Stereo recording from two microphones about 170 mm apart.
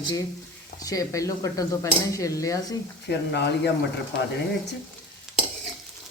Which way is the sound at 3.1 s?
80° left.